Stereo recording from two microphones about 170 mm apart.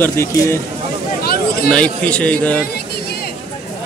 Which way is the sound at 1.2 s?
65° left (ahead or behind).